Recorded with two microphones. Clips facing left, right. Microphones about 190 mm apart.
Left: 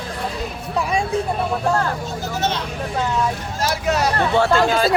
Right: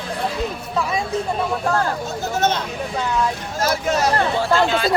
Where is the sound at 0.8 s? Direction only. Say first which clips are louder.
Left 1 dB; 15° left (ahead or behind).